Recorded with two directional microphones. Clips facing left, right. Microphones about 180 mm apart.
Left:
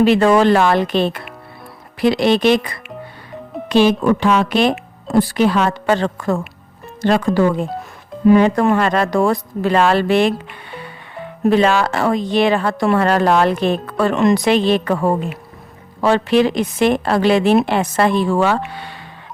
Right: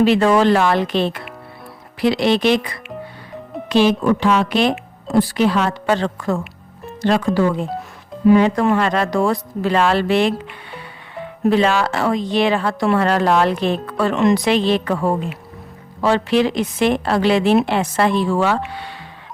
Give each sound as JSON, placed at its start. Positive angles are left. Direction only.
{"t": 0.0, "sound": "a woman's voice", "side_deg": 55}
{"t": 11.4, "sound": "a woman's voice", "side_deg": 50}